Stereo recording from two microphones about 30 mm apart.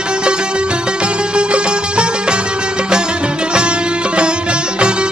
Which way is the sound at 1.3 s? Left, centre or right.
Right.